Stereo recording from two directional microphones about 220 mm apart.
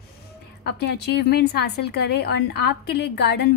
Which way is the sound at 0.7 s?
50° left (ahead or behind).